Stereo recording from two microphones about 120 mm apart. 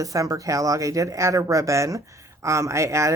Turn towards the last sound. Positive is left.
turn(degrees=-25)  # may be behind; listen again after turning